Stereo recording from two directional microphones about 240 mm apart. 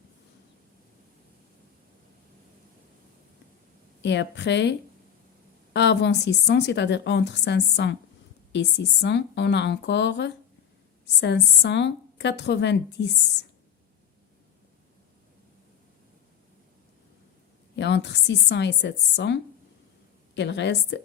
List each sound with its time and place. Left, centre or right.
4.0 s a woman's voice: left
17.7 s a woman's voice: left